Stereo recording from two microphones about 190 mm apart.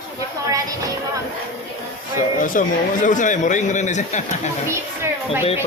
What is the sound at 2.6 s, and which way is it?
Speech, 45° left (ahead or behind).